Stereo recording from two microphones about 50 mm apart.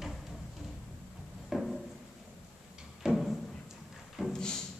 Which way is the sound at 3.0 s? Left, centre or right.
Centre.